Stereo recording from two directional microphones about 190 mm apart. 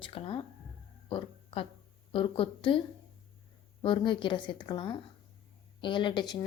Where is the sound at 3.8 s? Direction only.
25° left (ahead or behind).